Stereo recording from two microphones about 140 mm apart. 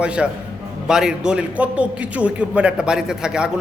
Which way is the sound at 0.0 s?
5° right (ahead or behind).